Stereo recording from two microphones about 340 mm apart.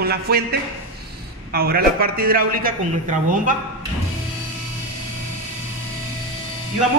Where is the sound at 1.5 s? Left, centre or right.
Right.